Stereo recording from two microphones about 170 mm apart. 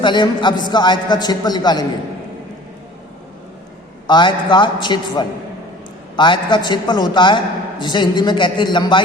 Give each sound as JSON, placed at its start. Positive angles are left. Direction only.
{"t": 0.0, "sound": "a man's voice", "side_deg": 25}
{"t": 4.0, "sound": "a man's voice", "side_deg": 25}